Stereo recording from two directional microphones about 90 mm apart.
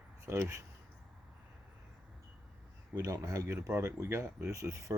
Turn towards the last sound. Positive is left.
turn(degrees=-35)  # may be behind; listen again after turning